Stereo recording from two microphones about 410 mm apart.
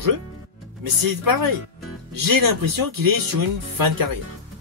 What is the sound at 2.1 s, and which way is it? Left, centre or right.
Speech, right.